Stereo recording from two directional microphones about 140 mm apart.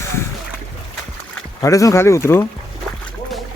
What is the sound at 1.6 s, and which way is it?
Speech, 25° left (ahead or behind).